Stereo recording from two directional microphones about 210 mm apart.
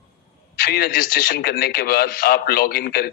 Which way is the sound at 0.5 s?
45° left (ahead or behind).